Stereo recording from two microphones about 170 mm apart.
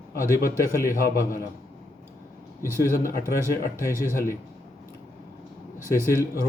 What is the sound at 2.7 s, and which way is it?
Speech, 60° left (ahead or behind).